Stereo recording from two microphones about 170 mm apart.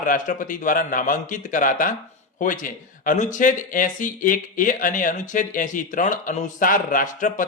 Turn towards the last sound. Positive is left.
turn(degrees=50)  # may be behind; listen again after turning